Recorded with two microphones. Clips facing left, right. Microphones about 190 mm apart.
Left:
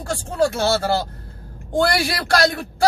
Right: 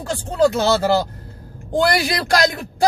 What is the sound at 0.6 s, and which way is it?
Speech, 20° right (ahead or behind).